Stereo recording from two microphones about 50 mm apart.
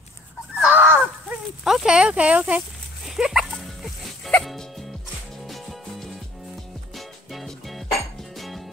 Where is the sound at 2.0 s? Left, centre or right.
Right.